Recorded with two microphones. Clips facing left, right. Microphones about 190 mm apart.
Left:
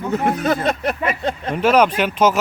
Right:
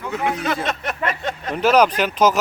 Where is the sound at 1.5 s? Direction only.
5° left (ahead or behind).